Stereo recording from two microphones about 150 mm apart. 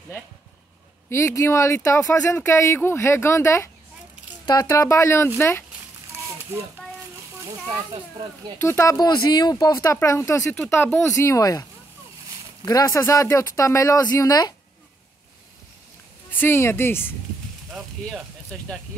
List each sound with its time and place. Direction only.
1.1 s speech: 20° left (ahead or behind)
6.5 s speech: 15° right (ahead or behind)
8.5 s speech: 15° left (ahead or behind)
12.6 s speech: 25° left (ahead or behind)
16.3 s speech: 15° left (ahead or behind)